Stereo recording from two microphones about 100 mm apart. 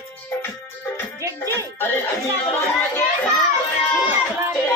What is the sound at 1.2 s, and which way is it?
Music, 30° right (ahead or behind).